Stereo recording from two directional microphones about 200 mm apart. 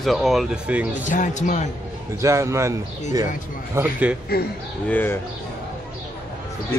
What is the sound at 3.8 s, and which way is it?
Speech, 10° right (ahead or behind).